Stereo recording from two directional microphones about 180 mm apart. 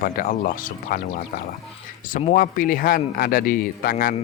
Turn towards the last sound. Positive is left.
turn(degrees=55)  # may be behind; listen again after turning